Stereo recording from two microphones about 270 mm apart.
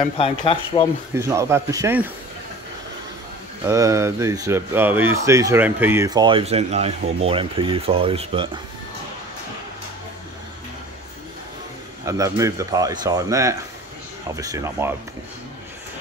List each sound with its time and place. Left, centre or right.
0.0 s speech: centre
1.1 s speech: centre
3.6 s speech: centre
12.0 s speech: centre